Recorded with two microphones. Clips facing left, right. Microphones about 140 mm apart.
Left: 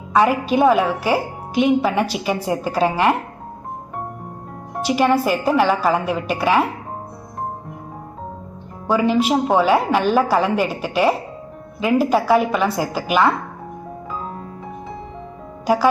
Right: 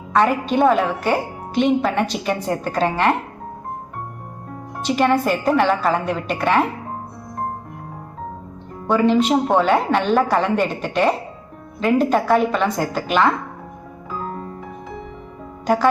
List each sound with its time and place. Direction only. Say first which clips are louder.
0.1 s a woman's voice: left 1 dB; 5° left (ahead or behind)
4.8 s a woman's voice: left 1 dB; 10° left (ahead or behind)
8.9 s a woman's voice: right 1 dB; 5° left (ahead or behind)
14.2 s music: right 6 dB; centre (ahead or behind)
15.6 s speech: left 1 dB; 10° left (ahead or behind)